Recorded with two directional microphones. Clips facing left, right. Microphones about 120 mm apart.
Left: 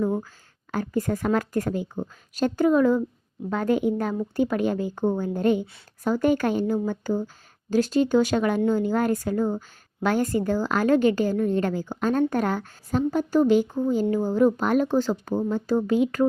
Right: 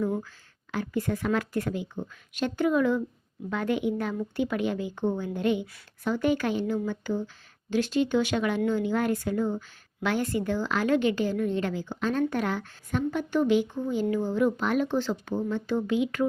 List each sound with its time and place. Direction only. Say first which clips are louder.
0.7 s a woman's voice: left 3 dB; 40° left (ahead or behind)